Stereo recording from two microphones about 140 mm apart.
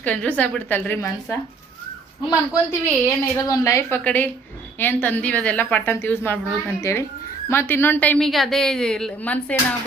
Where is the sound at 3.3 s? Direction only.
20° left (ahead or behind).